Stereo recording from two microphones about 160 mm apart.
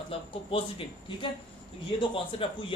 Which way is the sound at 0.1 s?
35° left (ahead or behind).